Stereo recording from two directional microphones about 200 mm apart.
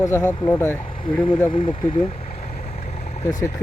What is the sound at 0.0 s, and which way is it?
Speech, 15° left (ahead or behind).